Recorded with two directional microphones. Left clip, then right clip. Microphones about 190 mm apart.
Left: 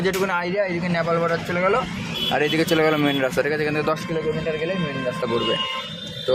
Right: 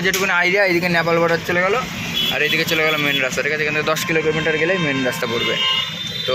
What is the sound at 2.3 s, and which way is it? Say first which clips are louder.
Speech: even; 35° left (ahead or behind).